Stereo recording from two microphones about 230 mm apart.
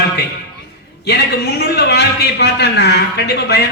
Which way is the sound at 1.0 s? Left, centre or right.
Left.